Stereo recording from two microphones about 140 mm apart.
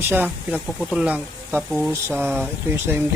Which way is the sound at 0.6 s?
Centre (ahead or behind).